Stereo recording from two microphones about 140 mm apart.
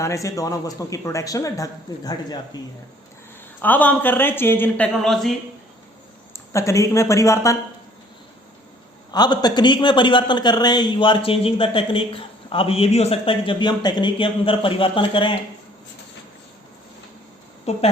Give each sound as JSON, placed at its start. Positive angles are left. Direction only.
{"t": 0.0, "sound": "speech", "side_deg": 20}
{"t": 3.6, "sound": "speech", "side_deg": 10}
{"t": 4.9, "sound": "speech", "side_deg": 0}
{"t": 6.3, "sound": "speech", "side_deg": 20}
{"t": 9.1, "sound": "a man's voice", "side_deg": 30}
{"t": 17.7, "sound": "a woman's voice", "side_deg": 50}